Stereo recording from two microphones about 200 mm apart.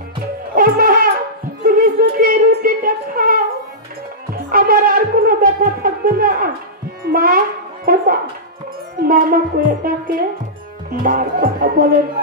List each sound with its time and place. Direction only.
0.6 s music: 45° right (ahead or behind)
1.6 s a sound: 45° right (ahead or behind)
4.5 s music: 45° right (ahead or behind)
7.1 s a child's voice: 45° right (ahead or behind)
9.0 s music: 45° right (ahead or behind)